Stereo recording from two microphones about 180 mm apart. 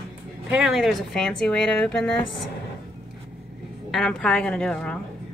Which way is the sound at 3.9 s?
5° left (ahead or behind).